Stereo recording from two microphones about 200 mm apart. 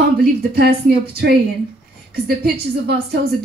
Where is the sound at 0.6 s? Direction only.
50° right (ahead or behind).